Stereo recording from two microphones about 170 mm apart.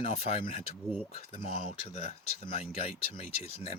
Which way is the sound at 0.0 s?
35° left (ahead or behind).